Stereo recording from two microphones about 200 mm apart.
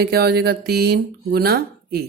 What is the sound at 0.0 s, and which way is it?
Speech, 50° right (ahead or behind).